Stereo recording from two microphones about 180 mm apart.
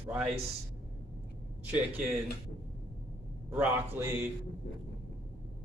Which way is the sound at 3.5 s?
10° right (ahead or behind).